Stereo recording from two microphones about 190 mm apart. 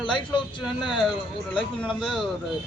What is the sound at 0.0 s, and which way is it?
Speech, 25° left (ahead or behind).